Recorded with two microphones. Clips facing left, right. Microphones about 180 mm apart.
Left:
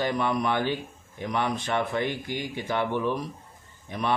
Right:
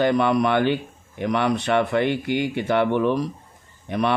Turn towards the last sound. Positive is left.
turn(degrees=-70)  # may be behind; listen again after turning